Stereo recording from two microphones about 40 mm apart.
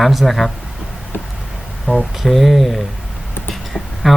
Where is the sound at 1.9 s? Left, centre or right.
Left.